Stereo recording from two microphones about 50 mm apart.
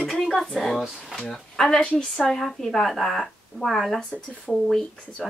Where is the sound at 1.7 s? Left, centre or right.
Left.